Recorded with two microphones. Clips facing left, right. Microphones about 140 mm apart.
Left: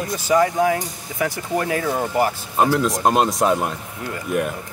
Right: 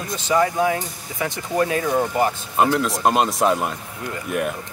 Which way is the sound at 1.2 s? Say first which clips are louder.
Even; 25° right (ahead or behind).